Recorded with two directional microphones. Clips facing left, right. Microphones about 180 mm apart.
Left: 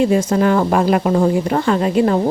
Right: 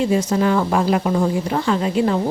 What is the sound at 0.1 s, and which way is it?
A woman's voice, 55° left (ahead or behind).